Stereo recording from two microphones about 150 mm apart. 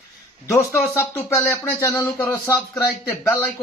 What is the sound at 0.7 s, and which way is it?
Speech, 20° left (ahead or behind).